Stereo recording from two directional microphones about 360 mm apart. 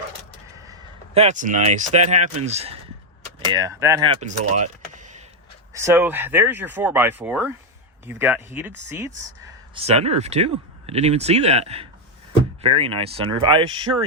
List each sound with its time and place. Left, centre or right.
0.6 s speech: centre
5.7 s speech: centre